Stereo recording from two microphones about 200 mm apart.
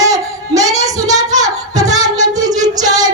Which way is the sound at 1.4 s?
20° right (ahead or behind).